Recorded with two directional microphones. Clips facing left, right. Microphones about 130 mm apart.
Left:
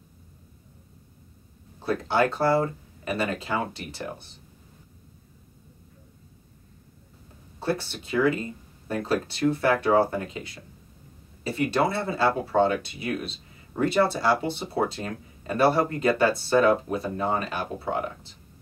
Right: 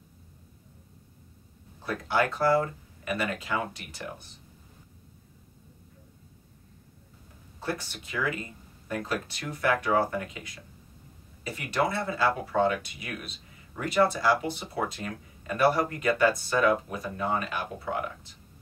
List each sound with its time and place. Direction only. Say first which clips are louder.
1.8 s speech: left 4 dB; 30° left (ahead or behind)
7.6 s speech: left 6 dB; 30° left (ahead or behind)